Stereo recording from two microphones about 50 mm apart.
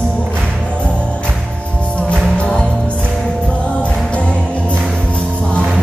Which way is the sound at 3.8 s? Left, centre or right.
Left.